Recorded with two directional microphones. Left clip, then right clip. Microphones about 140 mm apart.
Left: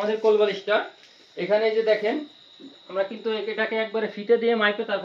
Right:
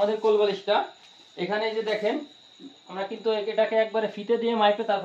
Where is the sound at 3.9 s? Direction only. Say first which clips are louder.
Left 3 dB; 5° right (ahead or behind).